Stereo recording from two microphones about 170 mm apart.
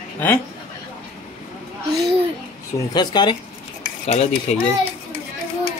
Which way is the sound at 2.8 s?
25° left (ahead or behind).